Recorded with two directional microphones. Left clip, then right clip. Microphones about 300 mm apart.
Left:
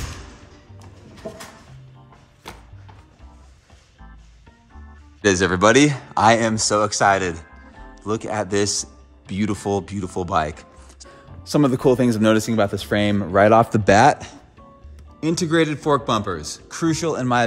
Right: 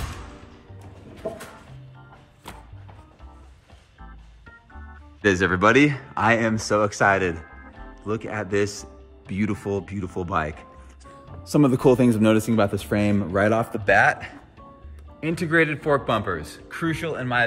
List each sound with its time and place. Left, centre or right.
5.2 s speech: centre
13.4 s speech: left
15.2 s speech: centre